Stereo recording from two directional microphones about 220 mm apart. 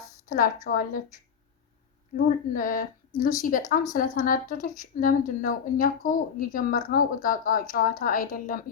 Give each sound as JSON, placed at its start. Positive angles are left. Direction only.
{"t": 0.3, "sound": "speech", "side_deg": 40}
{"t": 2.1, "sound": "speech", "side_deg": 40}